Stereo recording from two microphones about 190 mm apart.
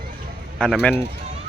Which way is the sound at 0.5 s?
5° left (ahead or behind).